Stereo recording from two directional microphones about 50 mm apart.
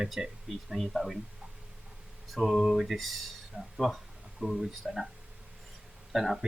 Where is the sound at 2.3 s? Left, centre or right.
Centre.